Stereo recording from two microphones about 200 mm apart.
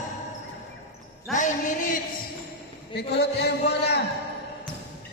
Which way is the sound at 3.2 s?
55° left (ahead or behind).